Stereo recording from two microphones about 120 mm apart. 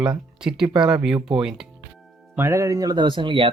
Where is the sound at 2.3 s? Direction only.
20° right (ahead or behind); by 3.5 s 45° right (ahead or behind).